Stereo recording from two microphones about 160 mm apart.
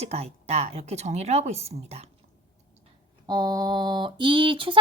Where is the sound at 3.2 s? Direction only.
25° right (ahead or behind).